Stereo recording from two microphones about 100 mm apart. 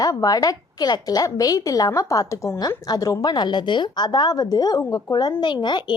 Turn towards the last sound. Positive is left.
turn(degrees=50)  # may be behind; listen again after turning